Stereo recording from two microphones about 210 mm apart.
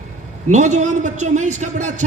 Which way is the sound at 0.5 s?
35° right (ahead or behind).